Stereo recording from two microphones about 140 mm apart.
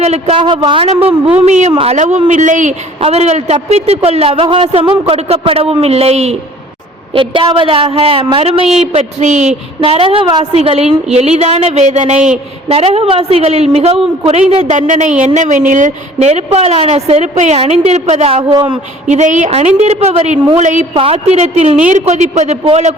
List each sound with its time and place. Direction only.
0.0 s a man's voice: 50° right (ahead or behind)
1.5 s a woman's voice: 55° right (ahead or behind)
1.7 s a woman's voice: 45° right (ahead or behind); by 2.7 s 60° right (ahead or behind)
3.0 s a man's voice: 50° right (ahead or behind)
8.9 s a man's voice: 55° right (ahead or behind)
12.6 s a man's voice: 45° right (ahead or behind)
14.5 s a woman's voice: 55° right (ahead or behind)
16.1 s a man's voice: 50° right (ahead or behind)
18.5 s a man's voice: 30° right (ahead or behind)
19.0 s a man's voice: 55° right (ahead or behind)
20.9 s a man's voice: 45° right (ahead or behind)